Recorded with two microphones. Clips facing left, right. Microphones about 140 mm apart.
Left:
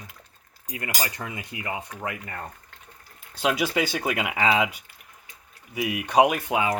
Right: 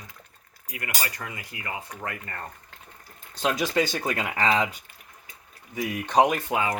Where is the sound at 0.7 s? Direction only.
25° left (ahead or behind).